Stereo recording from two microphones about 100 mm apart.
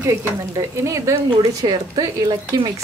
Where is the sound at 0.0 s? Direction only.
30° right (ahead or behind).